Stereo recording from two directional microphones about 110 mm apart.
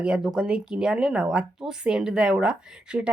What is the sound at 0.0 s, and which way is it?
Speech, 5° right (ahead or behind).